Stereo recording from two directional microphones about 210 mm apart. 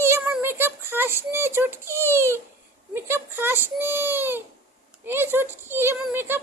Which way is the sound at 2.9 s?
10° right (ahead or behind).